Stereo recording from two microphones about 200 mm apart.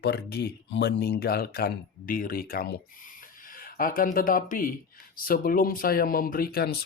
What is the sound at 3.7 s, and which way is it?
Speech, 45° left (ahead or behind).